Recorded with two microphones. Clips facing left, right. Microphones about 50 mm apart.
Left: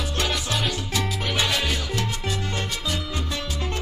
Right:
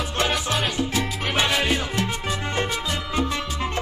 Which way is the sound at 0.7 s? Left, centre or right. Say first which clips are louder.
Right 3 dB; right.